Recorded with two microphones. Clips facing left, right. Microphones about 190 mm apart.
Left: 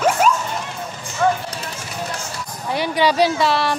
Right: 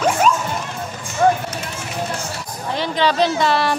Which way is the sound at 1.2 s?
35° right (ahead or behind).